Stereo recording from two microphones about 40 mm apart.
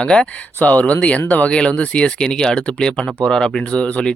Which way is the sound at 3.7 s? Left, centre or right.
Left.